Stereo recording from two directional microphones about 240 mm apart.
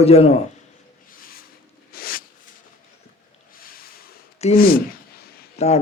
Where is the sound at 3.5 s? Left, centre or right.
Left.